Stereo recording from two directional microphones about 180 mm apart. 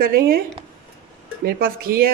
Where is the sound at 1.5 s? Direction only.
55° right (ahead or behind).